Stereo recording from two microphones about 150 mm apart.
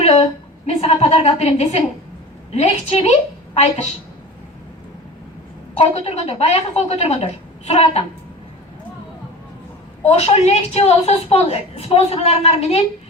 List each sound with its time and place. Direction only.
0.0 s a sound: 40° left (ahead or behind)
0.8 s a woman's voice: 40° left (ahead or behind)
5.7 s a woman's voice: 40° left (ahead or behind)
10.0 s a woman's voice: 45° left (ahead or behind)